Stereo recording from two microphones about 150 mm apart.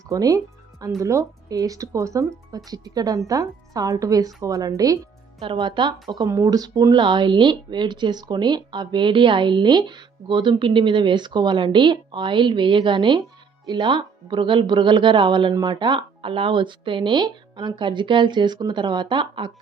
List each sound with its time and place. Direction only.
0.1 s a woman's voice: 25° right (ahead or behind)
5.4 s speech: 35° right (ahead or behind)